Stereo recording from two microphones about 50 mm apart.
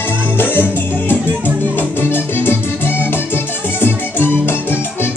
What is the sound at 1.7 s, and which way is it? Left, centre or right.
Music, left.